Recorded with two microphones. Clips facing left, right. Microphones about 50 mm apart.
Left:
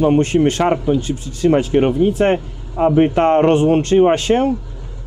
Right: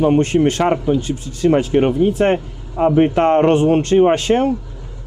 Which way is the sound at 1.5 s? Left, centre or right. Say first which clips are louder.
Even; left.